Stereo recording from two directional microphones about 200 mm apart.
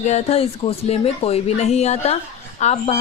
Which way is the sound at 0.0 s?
35° left (ahead or behind).